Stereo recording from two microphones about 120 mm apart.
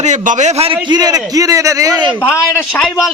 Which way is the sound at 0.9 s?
35° right (ahead or behind).